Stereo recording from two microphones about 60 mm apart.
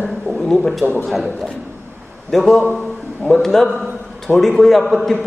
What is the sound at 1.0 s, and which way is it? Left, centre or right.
A man's voice, centre.